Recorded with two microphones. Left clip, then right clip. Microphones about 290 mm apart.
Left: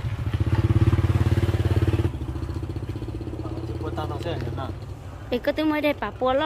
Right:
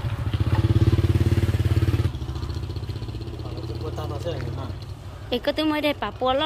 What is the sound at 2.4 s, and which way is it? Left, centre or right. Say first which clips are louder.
Vehicle: left 2 dB; left.